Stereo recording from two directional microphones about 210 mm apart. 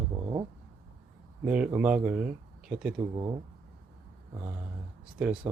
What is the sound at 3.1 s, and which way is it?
Speech, 20° right (ahead or behind).